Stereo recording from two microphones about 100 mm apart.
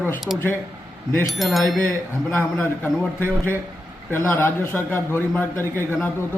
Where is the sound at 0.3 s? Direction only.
10° right (ahead or behind).